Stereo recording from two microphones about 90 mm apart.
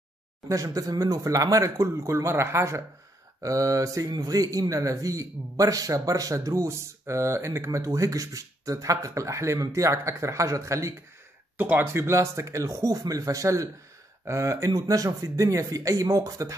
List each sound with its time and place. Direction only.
0.5 s a man's voice: 40° right (ahead or behind)
11.5 s a man's voice: 20° right (ahead or behind); by 16.5 s 35° right (ahead or behind)